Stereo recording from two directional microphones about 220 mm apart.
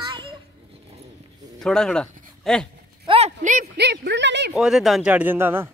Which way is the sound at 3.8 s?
50° right (ahead or behind).